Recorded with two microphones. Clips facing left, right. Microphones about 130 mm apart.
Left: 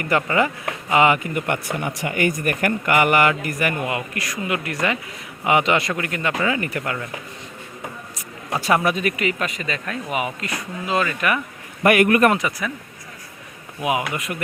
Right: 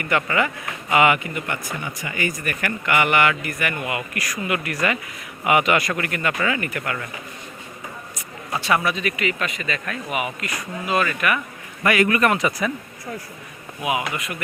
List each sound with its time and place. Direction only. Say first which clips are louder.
0.2 s speech: left 2 dB; 30° left (ahead or behind)
1.5 s speech: left 5 dB; 65° left (ahead or behind); by 6.9 s 30° left (ahead or behind)
8.6 s speech: left 2 dB; 45° left (ahead or behind)
11.8 s speech: left 4 dB; 55° left (ahead or behind)
12.4 s speech: right 3 dB; 15° right (ahead or behind)
13.8 s speech: left 2 dB; 5° right (ahead or behind)